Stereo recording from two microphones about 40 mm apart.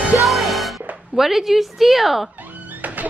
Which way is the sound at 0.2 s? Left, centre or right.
Centre.